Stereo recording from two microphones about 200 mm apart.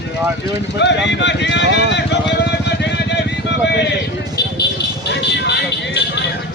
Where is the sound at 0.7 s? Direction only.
60° left (ahead or behind).